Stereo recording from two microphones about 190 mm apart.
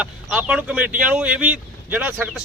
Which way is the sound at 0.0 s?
5° right (ahead or behind).